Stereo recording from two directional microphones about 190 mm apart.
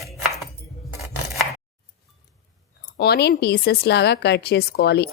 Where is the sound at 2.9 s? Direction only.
60° left (ahead or behind).